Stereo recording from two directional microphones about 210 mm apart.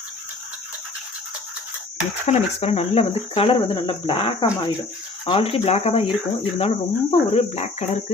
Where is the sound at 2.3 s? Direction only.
30° left (ahead or behind).